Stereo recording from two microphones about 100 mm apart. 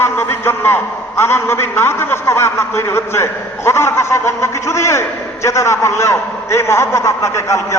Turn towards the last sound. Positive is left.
turn(degrees=30)  # may be behind; listen again after turning